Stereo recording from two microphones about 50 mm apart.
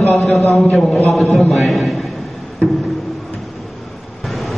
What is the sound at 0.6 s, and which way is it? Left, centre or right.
Speech, left.